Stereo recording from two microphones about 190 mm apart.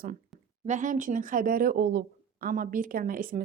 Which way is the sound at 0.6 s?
40° right (ahead or behind).